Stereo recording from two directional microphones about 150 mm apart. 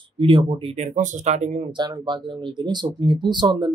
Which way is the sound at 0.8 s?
50° right (ahead or behind).